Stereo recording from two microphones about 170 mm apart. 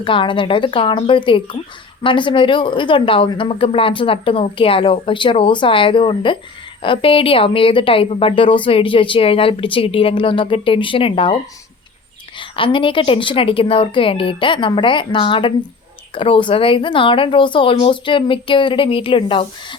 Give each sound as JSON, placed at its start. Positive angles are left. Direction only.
{"t": 0.0, "sound": "a woman's voice", "side_deg": 30}
{"t": 12.4, "sound": "a woman's voice", "side_deg": 30}